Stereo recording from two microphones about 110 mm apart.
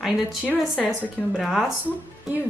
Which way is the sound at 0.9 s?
Centre (ahead or behind).